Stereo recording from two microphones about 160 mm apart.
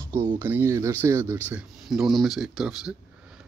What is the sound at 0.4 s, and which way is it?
Speech, 15° right (ahead or behind).